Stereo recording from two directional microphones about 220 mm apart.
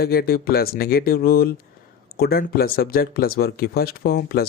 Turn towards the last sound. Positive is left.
turn(degrees=45)  # may be behind; listen again after turning